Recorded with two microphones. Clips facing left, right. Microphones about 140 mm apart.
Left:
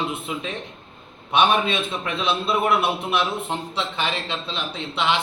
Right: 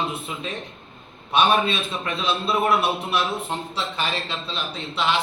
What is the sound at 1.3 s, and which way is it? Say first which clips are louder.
Speech: even; 20° left (ahead or behind).